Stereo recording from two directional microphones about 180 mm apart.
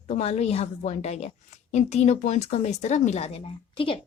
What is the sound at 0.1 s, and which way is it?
Speech, 35° left (ahead or behind).